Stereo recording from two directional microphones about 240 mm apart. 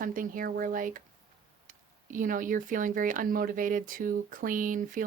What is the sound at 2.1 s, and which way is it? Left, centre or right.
Speech, right.